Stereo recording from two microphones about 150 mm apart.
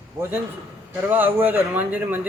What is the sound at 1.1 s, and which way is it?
Speech, 15° right (ahead or behind).